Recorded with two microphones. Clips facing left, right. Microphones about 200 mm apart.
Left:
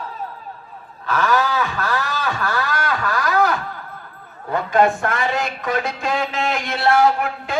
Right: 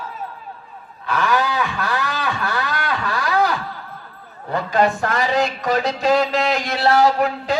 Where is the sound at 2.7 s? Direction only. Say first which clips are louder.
Left 1 dB; 45° left (ahead or behind).